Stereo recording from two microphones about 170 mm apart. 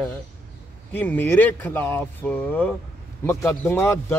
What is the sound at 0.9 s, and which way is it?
A man's voice, 10° left (ahead or behind).